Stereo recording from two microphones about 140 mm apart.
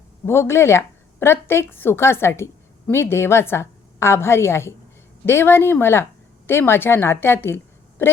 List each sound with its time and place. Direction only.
0.3 s a woman's voice: 20° left (ahead or behind)